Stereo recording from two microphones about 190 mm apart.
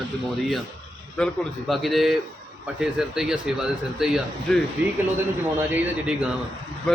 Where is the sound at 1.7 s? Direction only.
Centre (ahead or behind).